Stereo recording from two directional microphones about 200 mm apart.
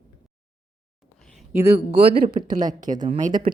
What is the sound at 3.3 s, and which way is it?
Speech, 20° right (ahead or behind).